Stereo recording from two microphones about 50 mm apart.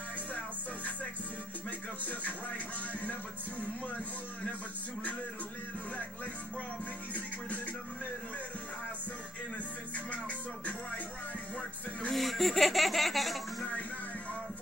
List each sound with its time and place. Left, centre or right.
2.0 s speech: left
7.2 s speech: left
9.9 s music: left
12.1 s speech: centre